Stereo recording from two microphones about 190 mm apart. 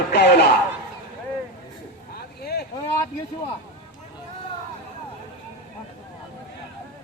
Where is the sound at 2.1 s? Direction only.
55° left (ahead or behind).